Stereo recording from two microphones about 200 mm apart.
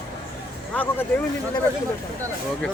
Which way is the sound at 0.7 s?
10° left (ahead or behind).